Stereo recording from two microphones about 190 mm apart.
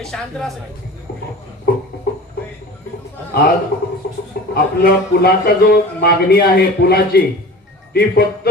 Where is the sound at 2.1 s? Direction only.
55° left (ahead or behind).